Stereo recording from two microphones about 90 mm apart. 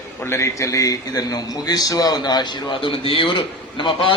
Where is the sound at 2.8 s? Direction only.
80° left.